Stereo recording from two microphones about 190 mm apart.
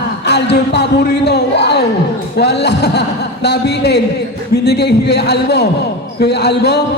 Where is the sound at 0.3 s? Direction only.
65° left (ahead or behind).